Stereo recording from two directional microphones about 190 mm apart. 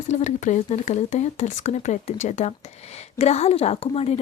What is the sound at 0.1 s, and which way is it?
Speech, 40° left (ahead or behind).